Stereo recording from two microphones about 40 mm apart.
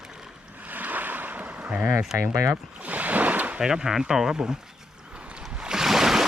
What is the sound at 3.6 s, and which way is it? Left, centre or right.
Speech, centre.